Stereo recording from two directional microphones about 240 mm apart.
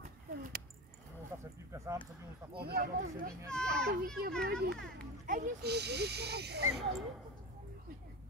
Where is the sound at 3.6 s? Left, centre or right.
Right.